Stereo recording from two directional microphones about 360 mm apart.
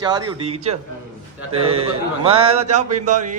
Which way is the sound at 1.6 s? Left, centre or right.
Centre.